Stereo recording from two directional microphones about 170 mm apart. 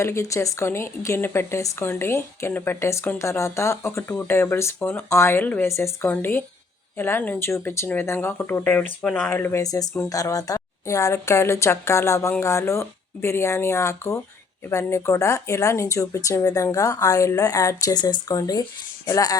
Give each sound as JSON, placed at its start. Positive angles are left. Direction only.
{"t": 0.0, "sound": "speech", "side_deg": 15}